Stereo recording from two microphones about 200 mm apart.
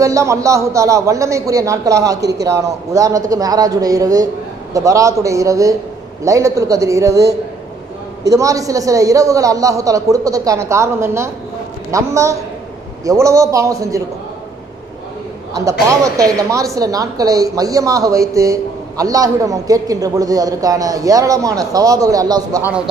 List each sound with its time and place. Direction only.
0.0 s speech: 15° right (ahead or behind)
15.9 s speech: 15° right (ahead or behind)